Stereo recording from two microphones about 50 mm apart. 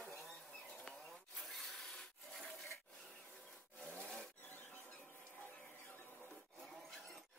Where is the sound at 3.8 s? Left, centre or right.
Left.